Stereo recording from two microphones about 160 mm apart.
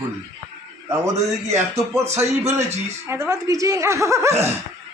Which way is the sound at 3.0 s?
15° right (ahead or behind).